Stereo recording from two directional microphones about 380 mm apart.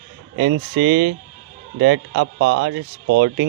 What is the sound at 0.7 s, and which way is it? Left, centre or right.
Speech, right.